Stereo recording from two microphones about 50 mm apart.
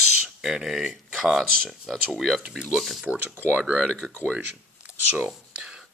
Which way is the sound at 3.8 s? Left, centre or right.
Centre.